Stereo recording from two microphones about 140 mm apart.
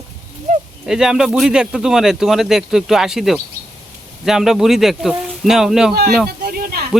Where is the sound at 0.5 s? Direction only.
60° right (ahead or behind).